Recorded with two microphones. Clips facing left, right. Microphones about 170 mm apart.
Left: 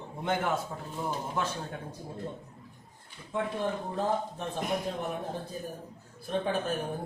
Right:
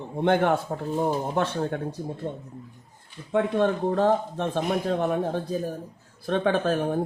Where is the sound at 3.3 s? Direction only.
75° right (ahead or behind).